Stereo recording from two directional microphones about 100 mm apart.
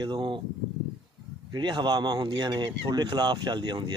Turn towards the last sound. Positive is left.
turn(degrees=-45)  # may be behind; listen again after turning